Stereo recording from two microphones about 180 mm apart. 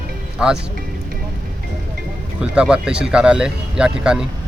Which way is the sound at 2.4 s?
5° right (ahead or behind).